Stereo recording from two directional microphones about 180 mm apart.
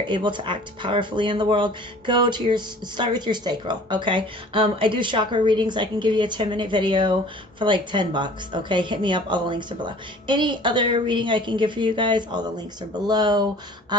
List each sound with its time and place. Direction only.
0.0 s speech: 25° right (ahead or behind)